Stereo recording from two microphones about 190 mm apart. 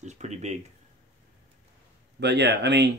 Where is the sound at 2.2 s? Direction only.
60° right (ahead or behind).